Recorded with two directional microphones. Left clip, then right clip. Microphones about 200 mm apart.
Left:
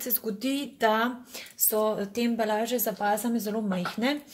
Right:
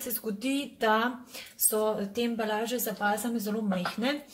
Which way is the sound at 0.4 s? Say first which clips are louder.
Left 3 dB; 35° left (ahead or behind).